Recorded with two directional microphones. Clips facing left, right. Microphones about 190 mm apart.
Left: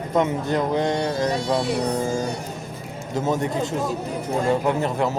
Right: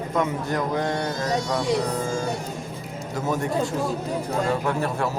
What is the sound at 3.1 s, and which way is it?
Speech, 20° left (ahead or behind).